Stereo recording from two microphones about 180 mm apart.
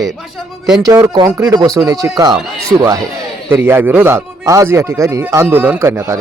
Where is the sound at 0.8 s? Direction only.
20° right (ahead or behind).